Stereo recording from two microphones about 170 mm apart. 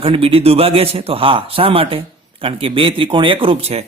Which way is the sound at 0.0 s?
35° right (ahead or behind).